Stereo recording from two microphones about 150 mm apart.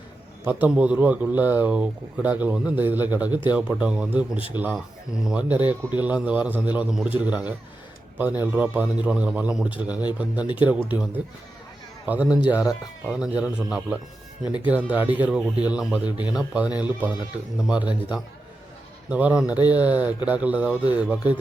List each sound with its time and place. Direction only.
0.4 s speech: 10° right (ahead or behind)
3.2 s speech: 30° left (ahead or behind)
3.5 s a man's voice: 5° right (ahead or behind)